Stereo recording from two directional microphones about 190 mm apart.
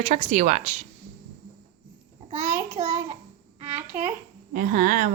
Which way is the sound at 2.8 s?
30° right (ahead or behind).